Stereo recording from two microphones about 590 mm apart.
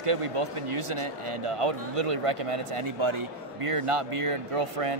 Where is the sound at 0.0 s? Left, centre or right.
Right.